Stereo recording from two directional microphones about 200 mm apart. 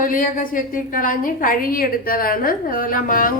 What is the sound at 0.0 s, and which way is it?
A woman's voice, 45° left (ahead or behind).